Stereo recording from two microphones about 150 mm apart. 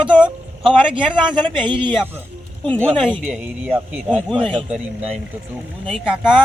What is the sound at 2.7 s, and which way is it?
Speech, 5° left (ahead or behind).